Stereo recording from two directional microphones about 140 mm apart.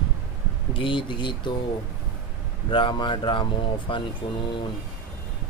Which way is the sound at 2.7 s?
35° left (ahead or behind).